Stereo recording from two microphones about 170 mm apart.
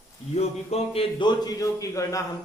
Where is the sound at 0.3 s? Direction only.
40° left (ahead or behind).